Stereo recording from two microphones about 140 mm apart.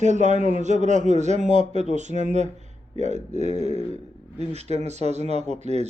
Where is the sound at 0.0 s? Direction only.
60° right (ahead or behind).